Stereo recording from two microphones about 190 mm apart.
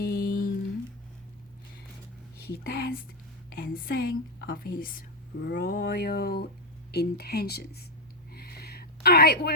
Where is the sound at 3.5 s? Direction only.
50° left (ahead or behind).